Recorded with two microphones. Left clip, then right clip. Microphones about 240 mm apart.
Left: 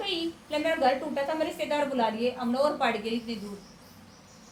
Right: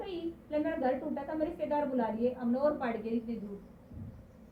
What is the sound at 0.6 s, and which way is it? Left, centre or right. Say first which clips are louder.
A woman's voice: left 8 dB; left.